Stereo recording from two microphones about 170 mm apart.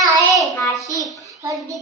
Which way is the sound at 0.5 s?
20° left (ahead or behind).